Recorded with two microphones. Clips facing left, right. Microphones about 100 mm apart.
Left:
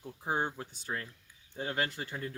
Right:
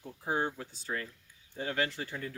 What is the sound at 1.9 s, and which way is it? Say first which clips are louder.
Speech: even; 25° left (ahead or behind).